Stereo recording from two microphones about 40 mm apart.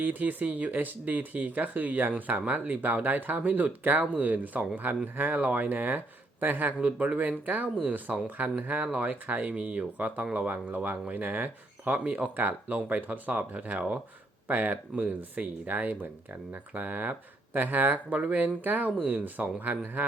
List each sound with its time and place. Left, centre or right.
0.0 s speech: right
6.7 s speech: right
7.2 s speech: right
11.1 s speech: right